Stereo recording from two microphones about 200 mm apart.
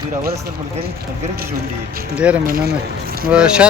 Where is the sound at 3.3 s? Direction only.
5° right (ahead or behind).